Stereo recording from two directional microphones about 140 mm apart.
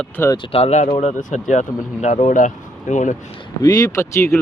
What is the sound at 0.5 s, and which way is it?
Speech, 50° left (ahead or behind).